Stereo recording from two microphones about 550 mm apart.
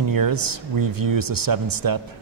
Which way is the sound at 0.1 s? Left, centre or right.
Right.